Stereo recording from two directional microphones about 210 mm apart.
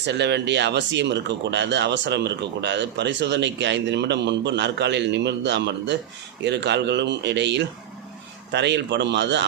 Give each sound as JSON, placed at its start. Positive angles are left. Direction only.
{"t": 0.0, "sound": "speech", "side_deg": -55}